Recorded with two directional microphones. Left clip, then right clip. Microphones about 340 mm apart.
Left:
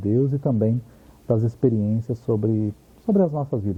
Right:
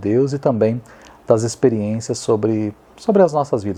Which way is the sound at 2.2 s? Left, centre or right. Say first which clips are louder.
Right 6 dB; centre.